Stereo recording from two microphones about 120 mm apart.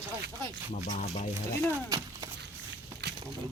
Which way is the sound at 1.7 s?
30° right (ahead or behind).